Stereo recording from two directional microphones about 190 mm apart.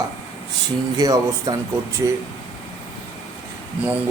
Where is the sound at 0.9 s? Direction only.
20° right (ahead or behind).